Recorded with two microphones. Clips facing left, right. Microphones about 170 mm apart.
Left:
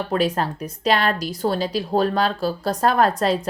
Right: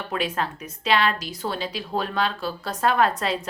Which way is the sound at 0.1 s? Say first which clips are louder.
Left 4 dB; 40° left (ahead or behind).